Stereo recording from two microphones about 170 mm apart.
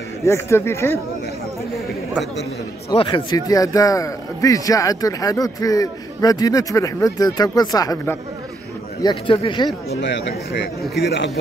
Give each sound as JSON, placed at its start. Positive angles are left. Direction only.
{"t": 0.2, "sound": "speech", "side_deg": 15}
{"t": 2.9, "sound": "a man's voice", "side_deg": 25}
{"t": 9.0, "sound": "speech", "side_deg": 30}
{"t": 9.9, "sound": "speech", "side_deg": 90}